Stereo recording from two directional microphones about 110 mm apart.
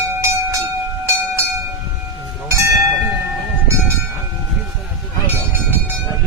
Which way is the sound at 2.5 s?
25° right (ahead or behind).